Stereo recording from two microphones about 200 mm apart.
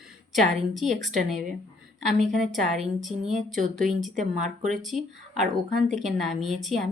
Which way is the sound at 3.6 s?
40° right (ahead or behind).